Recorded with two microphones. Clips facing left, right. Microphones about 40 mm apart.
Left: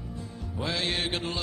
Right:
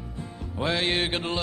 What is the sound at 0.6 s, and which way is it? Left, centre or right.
Music, right.